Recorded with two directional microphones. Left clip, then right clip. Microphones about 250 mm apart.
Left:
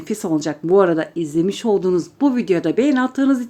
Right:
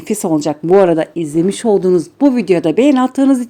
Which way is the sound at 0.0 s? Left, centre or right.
Right.